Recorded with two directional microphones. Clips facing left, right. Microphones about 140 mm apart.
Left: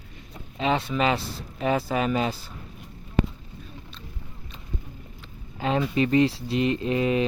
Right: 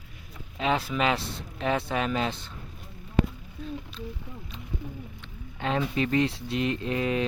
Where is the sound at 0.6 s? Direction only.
Centre (ahead or behind).